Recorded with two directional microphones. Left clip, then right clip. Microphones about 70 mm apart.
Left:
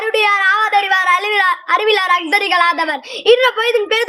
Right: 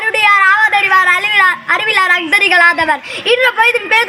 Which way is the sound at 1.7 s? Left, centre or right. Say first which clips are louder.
Right 2 dB; left.